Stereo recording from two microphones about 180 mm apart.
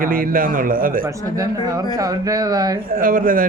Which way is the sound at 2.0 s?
20° right (ahead or behind).